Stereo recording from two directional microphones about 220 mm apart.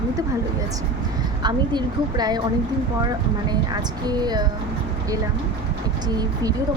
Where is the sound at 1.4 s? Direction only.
20° right (ahead or behind).